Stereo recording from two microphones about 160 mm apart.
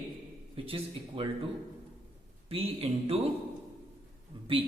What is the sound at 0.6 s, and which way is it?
Speech, 35° right (ahead or behind).